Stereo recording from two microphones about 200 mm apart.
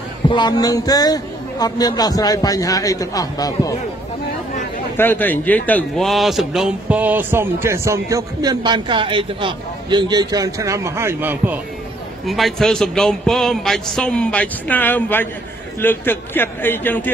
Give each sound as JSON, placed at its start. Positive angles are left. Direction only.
{"t": 0.3, "sound": "a man's voice", "side_deg": 20}
{"t": 4.9, "sound": "a man's voice", "side_deg": 10}